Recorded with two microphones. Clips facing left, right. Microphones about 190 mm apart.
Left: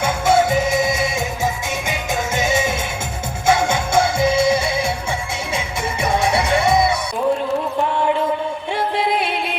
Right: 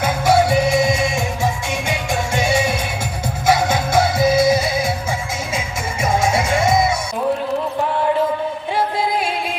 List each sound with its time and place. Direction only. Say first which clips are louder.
0.0 s music: right 1 dB; 25° left (ahead or behind)
1.9 s music: right 1 dB; 20° left (ahead or behind)